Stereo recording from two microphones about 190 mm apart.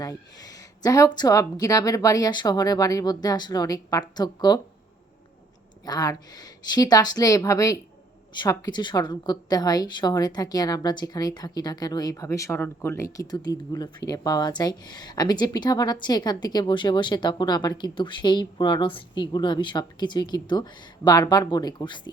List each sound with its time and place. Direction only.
0.0 s a woman's voice: 20° left (ahead or behind)
5.8 s a woman's voice: 20° left (ahead or behind)